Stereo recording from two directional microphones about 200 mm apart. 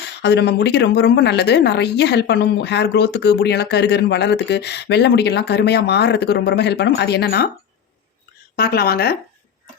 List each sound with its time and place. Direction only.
0.2 s a woman's voice: 55° left (ahead or behind)
8.5 s speech: 50° left (ahead or behind)